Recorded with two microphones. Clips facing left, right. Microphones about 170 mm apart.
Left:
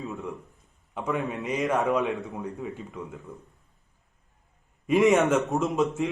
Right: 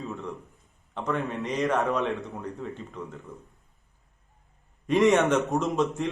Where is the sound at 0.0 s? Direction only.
Centre (ahead or behind).